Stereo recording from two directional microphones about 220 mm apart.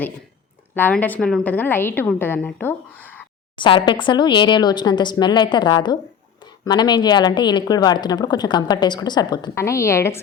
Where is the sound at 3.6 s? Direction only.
20° left (ahead or behind).